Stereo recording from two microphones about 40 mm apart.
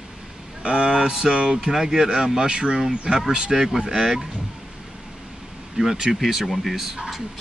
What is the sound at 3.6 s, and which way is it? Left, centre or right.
Speech, centre.